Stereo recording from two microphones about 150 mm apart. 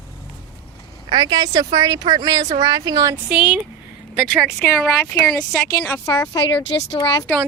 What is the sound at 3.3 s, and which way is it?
Speech, 5° right (ahead or behind).